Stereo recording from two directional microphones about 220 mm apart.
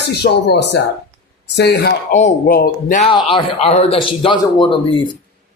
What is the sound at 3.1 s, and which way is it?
Speech, 25° left (ahead or behind).